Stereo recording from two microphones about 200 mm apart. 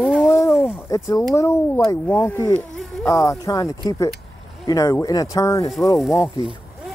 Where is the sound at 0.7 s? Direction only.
15° left (ahead or behind).